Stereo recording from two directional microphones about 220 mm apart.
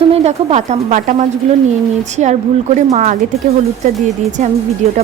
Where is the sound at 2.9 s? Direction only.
35° right (ahead or behind).